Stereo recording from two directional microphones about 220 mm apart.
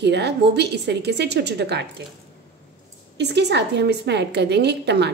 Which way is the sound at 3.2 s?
50° right (ahead or behind).